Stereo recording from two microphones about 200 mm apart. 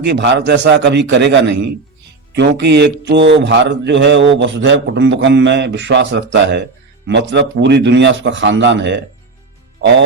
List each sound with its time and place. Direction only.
0.0 s speech: 60° right (ahead or behind)